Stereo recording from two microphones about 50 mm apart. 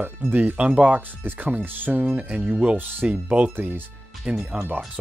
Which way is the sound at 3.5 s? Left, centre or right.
Right.